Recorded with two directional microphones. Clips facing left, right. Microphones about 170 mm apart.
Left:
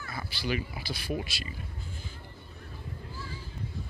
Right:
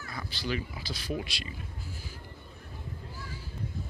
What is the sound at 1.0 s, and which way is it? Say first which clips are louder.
Speech: even; 5° left (ahead or behind).